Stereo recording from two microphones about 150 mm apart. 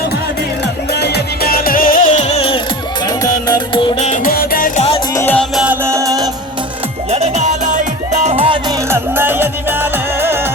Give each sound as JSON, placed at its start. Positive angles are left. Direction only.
{"t": 0.9, "sound": "music", "side_deg": 90}
{"t": 3.1, "sound": "music", "side_deg": 25}
{"t": 3.9, "sound": "music", "side_deg": 45}
{"t": 4.2, "sound": "music", "side_deg": 75}
{"t": 4.8, "sound": "music", "side_deg": 40}
{"t": 5.1, "sound": "music", "side_deg": 10}
{"t": 5.8, "sound": "music", "side_deg": -20}
{"t": 7.1, "sound": "music", "side_deg": -50}
{"t": 8.9, "sound": "music", "side_deg": -15}